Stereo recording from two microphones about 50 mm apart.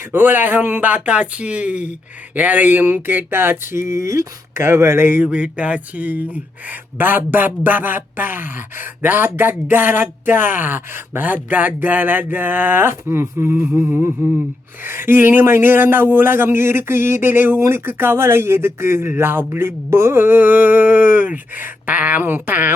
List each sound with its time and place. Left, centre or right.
0.1 s speech: right
1.0 s speech: right
4.6 s speech: right
5.0 s speech: right
5.3 s speech: right
12.9 s speech: right